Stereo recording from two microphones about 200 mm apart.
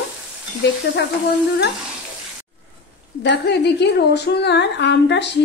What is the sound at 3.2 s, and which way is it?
A woman's voice, 60° left (ahead or behind).